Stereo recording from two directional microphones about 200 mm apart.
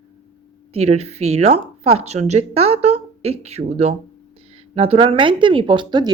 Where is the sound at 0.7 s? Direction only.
30° right (ahead or behind).